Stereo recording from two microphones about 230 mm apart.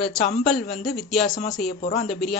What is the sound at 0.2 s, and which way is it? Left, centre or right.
Speech, left.